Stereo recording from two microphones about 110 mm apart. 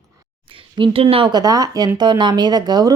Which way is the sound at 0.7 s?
50° right (ahead or behind).